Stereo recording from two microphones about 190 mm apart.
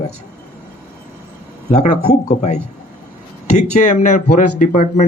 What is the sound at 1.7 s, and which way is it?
Speech, 40° left (ahead or behind).